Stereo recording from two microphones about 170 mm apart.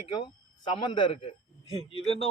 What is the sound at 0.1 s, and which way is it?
A man's voice, 25° left (ahead or behind).